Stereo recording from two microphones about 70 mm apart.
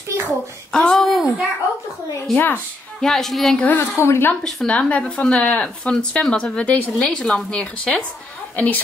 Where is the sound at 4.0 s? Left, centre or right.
Left.